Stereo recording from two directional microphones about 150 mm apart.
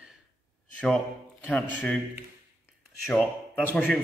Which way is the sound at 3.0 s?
5° left (ahead or behind).